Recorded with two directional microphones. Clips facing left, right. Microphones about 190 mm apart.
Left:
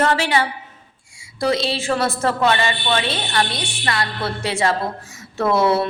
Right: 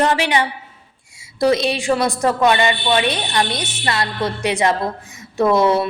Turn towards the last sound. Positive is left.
turn(degrees=-15)  # may be behind; listen again after turning